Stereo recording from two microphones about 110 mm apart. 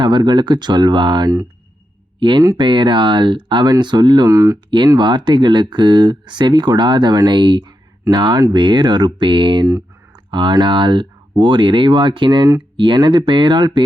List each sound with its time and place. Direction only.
0.0 s speech: 45° right (ahead or behind)
2.6 s speech: 45° right (ahead or behind)
4.3 s speech: 30° right (ahead or behind)
4.9 s speech: 45° right (ahead or behind)